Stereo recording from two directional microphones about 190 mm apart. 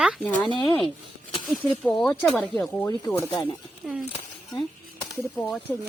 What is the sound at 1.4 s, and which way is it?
Speech, 5° left (ahead or behind).